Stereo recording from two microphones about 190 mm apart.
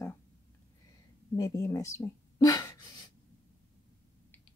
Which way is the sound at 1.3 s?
15° left (ahead or behind).